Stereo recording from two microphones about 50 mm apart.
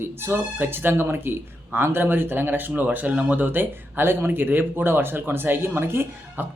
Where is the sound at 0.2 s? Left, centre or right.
Right.